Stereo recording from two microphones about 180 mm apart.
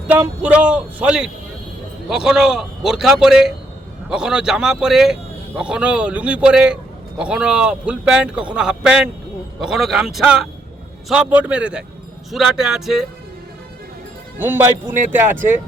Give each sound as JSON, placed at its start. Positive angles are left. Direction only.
{"t": 0.1, "sound": "a man's voice", "side_deg": -5}
{"t": 14.3, "sound": "a man's voice", "side_deg": -10}